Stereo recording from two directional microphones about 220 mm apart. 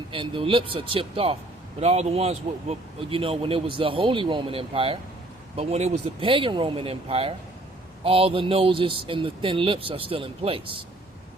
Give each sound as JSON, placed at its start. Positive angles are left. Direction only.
{"t": 0.1, "sound": "a man's voice", "side_deg": -25}